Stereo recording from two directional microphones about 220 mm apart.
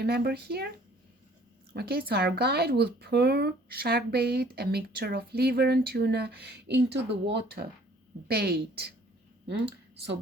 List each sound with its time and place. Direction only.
0.0 s speech: 45° right (ahead or behind)
1.7 s speech: 45° right (ahead or behind)